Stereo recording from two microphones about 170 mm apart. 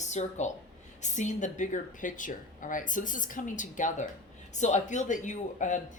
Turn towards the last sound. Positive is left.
turn(degrees=45)  # may be behind; listen again after turning